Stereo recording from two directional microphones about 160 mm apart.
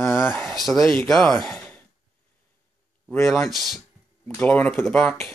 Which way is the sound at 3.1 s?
15° left (ahead or behind).